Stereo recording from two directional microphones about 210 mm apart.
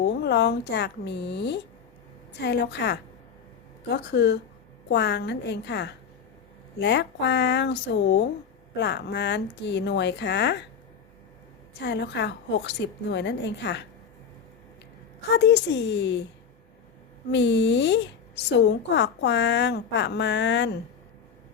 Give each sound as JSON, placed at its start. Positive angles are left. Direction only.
{"t": 0.0, "sound": "a woman's voice", "side_deg": 55}
{"t": 11.8, "sound": "a woman's voice", "side_deg": 55}
{"t": 15.4, "sound": "a woman's voice", "side_deg": 55}
{"t": 17.3, "sound": "a woman's voice", "side_deg": 55}